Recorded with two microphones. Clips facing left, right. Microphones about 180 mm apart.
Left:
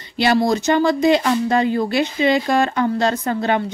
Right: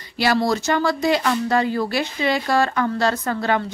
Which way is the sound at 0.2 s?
20° left (ahead or behind).